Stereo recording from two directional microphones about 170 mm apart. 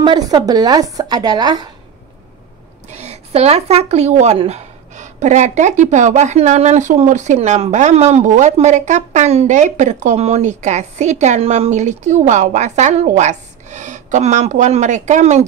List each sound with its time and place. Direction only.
0.0 s speech: 25° right (ahead or behind)
2.9 s speech: 40° right (ahead or behind)